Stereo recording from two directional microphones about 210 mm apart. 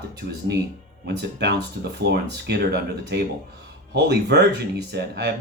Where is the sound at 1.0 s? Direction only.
55° right (ahead or behind).